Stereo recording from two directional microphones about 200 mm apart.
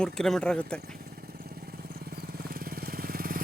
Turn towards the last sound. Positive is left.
turn(degrees=-45)  # may be behind; listen again after turning